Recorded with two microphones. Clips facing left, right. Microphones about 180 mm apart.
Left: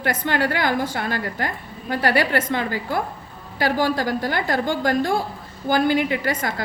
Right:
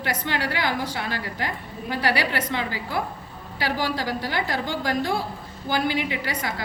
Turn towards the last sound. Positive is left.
turn(degrees=50)  # may be behind; listen again after turning